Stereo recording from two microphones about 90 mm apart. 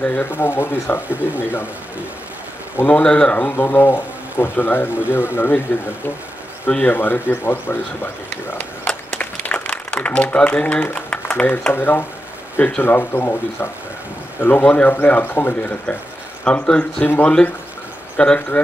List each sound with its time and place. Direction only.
0.0 s speech: 20° left (ahead or behind)
2.9 s speech: 10° left (ahead or behind)
3.5 s speech: 25° left (ahead or behind)
6.7 s speech: 20° left (ahead or behind)
9.1 s a sound: 15° left (ahead or behind)
11.7 s speech: 20° left (ahead or behind)